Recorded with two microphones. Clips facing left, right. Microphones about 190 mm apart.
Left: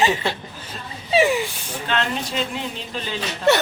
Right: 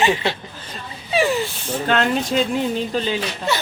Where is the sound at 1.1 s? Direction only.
20° left (ahead or behind).